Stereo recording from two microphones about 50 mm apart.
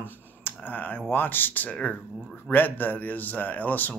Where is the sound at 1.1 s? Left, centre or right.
Left.